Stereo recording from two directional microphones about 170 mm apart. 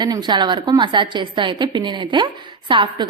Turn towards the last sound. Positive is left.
turn(degrees=-30)  # may be behind; listen again after turning